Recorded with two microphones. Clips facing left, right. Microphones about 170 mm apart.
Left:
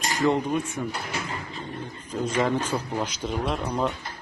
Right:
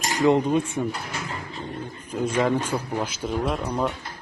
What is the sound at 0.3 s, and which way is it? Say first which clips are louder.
Speech: right 5 dB; 20° right (ahead or behind).